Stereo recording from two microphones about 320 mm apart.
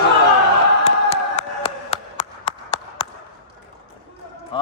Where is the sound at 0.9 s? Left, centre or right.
Centre.